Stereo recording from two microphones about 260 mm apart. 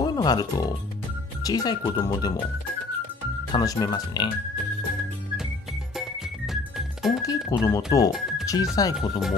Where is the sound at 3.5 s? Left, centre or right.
Centre.